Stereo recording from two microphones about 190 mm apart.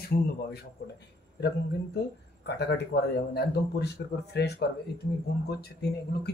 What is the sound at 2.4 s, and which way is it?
Speech, 60° left (ahead or behind).